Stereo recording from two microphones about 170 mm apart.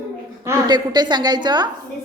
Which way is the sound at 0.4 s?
25° right (ahead or behind).